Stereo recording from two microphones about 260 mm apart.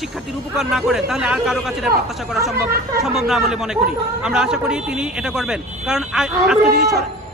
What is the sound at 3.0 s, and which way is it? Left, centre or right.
A man's voice, centre.